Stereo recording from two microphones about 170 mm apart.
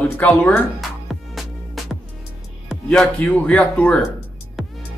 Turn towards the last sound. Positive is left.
turn(degrees=5)  # may be behind; listen again after turning